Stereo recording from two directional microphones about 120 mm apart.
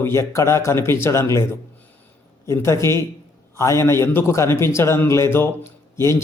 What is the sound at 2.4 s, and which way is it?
Speech, 25° left (ahead or behind).